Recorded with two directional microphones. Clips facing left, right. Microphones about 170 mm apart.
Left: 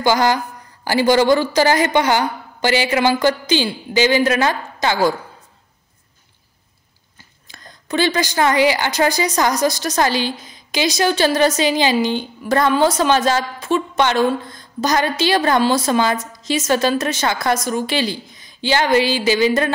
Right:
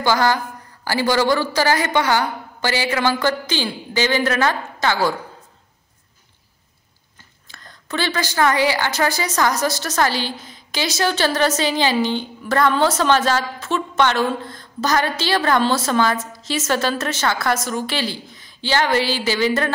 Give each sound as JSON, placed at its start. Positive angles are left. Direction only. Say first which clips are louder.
{"t": 0.0, "sound": "a woman's voice", "louder": "left 2 dB", "side_deg": 15}
{"t": 7.4, "sound": "a woman's voice", "louder": "left 2 dB", "side_deg": 15}